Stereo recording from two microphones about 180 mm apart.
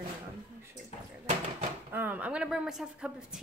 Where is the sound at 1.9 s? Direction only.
10° right (ahead or behind).